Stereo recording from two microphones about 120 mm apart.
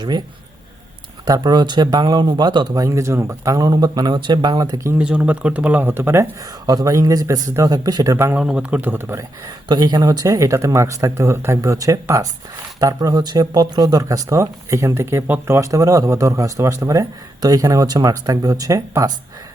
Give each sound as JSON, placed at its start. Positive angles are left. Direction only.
{"t": 1.2, "sound": "speech", "side_deg": -35}
{"t": 4.9, "sound": "speech", "side_deg": -10}
{"t": 6.4, "sound": "speech", "side_deg": -30}
{"t": 8.4, "sound": "speech", "side_deg": -5}
{"t": 9.6, "sound": "speech", "side_deg": -35}